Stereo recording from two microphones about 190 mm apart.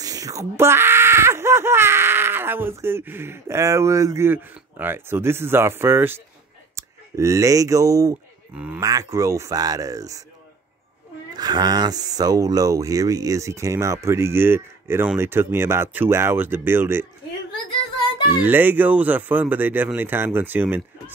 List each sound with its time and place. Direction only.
0.0 s speech: 20° right (ahead or behind)
8.5 s speech: 5° right (ahead or behind)
11.3 s speech: 20° right (ahead or behind)
18.4 s speech: 10° right (ahead or behind)